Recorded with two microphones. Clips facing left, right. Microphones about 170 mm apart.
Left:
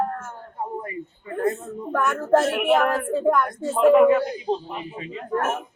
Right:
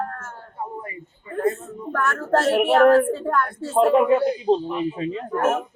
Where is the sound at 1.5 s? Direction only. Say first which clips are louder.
Left 2 dB; 15° left (ahead or behind).